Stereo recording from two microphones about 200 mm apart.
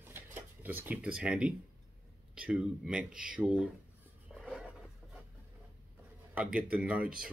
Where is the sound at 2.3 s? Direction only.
5° right (ahead or behind).